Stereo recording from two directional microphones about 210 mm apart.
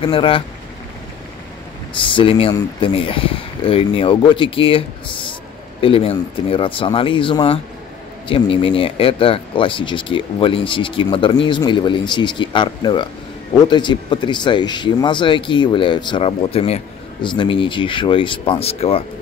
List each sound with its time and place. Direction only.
0.0 s speech: 25° left (ahead or behind)
2.0 s speech: 25° left (ahead or behind)